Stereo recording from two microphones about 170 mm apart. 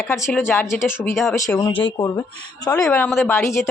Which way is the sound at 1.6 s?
30° left (ahead or behind).